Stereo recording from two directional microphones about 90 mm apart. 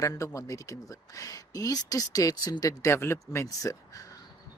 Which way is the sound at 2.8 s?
30° left (ahead or behind).